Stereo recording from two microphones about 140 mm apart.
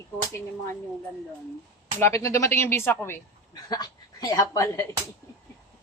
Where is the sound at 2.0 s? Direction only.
20° left (ahead or behind).